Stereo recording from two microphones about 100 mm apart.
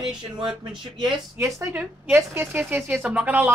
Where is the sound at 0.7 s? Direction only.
50° right (ahead or behind).